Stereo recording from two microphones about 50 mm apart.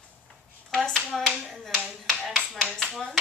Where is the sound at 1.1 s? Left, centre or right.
Centre.